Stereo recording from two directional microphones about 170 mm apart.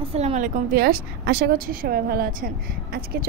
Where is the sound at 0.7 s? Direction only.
60° right (ahead or behind).